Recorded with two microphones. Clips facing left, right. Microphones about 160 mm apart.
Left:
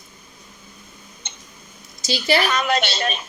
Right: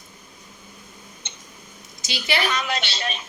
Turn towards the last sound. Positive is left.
turn(degrees=50)  # may be behind; listen again after turning